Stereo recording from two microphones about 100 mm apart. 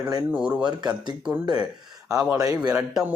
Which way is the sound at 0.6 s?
45° right (ahead or behind).